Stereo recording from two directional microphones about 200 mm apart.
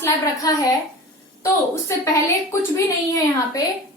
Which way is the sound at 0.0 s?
20° left (ahead or behind).